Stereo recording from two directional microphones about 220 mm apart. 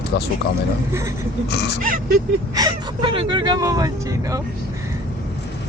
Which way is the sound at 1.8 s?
40° right (ahead or behind).